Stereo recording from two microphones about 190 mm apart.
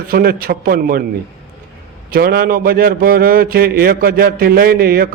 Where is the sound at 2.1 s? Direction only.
55° right (ahead or behind).